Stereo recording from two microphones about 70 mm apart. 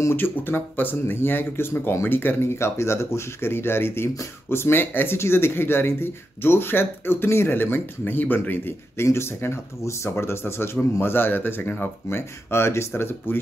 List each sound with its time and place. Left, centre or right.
0.0 s speech: left